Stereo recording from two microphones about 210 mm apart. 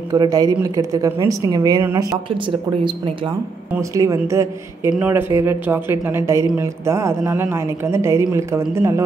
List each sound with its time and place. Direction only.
0.1 s a woman's voice: 15° right (ahead or behind)
3.7 s a woman's voice: 15° right (ahead or behind)